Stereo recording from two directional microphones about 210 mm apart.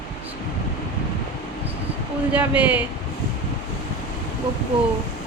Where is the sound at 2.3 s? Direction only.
5° right (ahead or behind).